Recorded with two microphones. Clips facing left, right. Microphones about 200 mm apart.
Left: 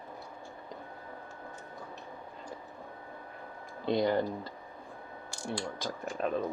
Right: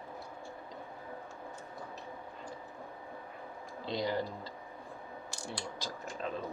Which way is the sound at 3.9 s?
55° left (ahead or behind).